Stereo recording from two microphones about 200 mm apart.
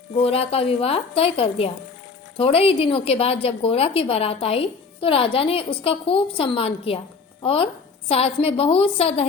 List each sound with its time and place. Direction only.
0.2 s a woman's voice: 30° left (ahead or behind)